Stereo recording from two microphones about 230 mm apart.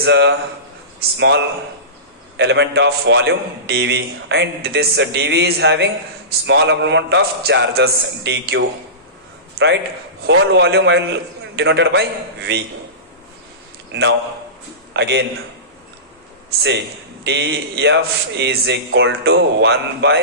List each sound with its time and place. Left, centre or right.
0.0 s a man's voice: right
10.2 s a man's voice: right
13.9 s a man's voice: right
16.4 s a man's voice: right